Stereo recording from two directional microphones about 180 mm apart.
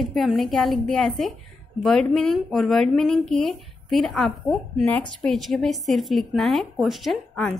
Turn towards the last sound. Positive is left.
turn(degrees=0)  # may be behind; listen again after turning